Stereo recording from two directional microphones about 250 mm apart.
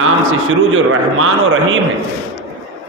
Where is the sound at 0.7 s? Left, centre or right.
Right.